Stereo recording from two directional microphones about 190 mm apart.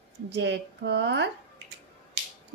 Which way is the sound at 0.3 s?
70° right (ahead or behind).